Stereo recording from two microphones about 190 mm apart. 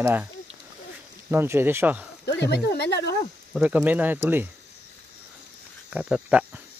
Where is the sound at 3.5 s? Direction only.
5° right (ahead or behind).